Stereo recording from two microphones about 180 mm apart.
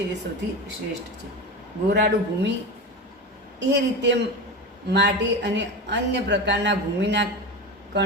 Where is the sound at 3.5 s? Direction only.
75° right (ahead or behind).